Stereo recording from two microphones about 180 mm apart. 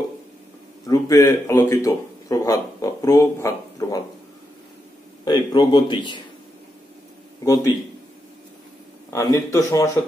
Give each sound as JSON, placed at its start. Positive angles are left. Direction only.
{"t": 0.8, "sound": "speech", "side_deg": 20}
{"t": 5.2, "sound": "a man's voice", "side_deg": 20}
{"t": 7.4, "sound": "a man's voice", "side_deg": 20}
{"t": 9.1, "sound": "speech", "side_deg": 20}